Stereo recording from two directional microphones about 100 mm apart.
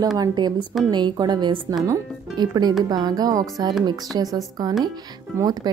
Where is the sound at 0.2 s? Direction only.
45° right (ahead or behind).